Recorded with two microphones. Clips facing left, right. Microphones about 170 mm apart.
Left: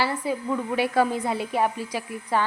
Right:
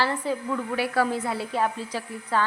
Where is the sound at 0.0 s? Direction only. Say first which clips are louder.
Even; 10° left (ahead or behind).